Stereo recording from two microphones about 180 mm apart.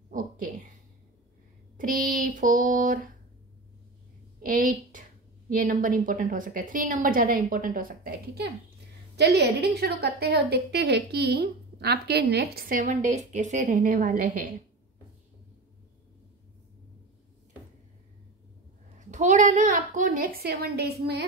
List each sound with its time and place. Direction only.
1.8 s a woman's voice: 50° right (ahead or behind)
4.4 s a woman's voice: 50° right (ahead or behind)
9.1 s a woman's voice: 65° right (ahead or behind); by 14.5 s 50° right (ahead or behind)
18.9 s a woman's voice: 40° right (ahead or behind); by 21.3 s 65° right (ahead or behind)